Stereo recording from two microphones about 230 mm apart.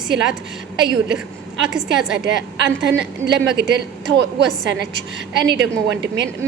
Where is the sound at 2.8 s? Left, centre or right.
Right.